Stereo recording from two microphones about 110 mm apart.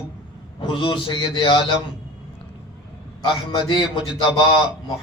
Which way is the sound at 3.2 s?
45° left (ahead or behind).